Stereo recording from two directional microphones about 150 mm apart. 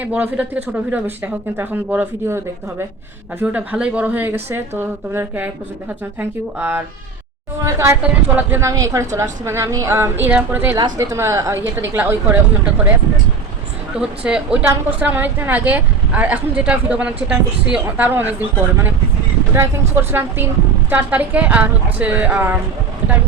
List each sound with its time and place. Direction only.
0.0 s a woman's voice: 10° right (ahead or behind)
10.8 s a woman's voice: 25° right (ahead or behind)
14.0 s a woman's voice: 5° right (ahead or behind)
19.5 s a woman's voice: 15° right (ahead or behind)